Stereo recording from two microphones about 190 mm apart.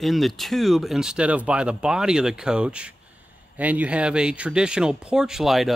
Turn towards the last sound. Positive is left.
turn(degrees=0)  # may be behind; listen again after turning